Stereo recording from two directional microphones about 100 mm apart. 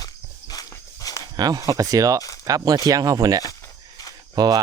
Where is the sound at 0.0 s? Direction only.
40° left (ahead or behind).